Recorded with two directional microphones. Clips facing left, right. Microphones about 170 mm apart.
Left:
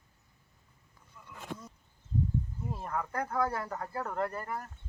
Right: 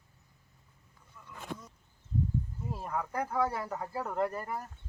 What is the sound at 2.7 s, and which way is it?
Speech, 10° right (ahead or behind).